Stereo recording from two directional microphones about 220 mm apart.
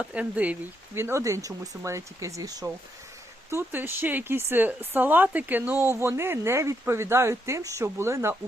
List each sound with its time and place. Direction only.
0.0 s speech: 5° right (ahead or behind)